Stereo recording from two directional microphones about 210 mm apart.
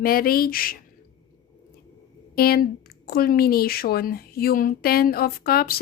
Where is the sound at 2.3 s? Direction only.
45° left (ahead or behind).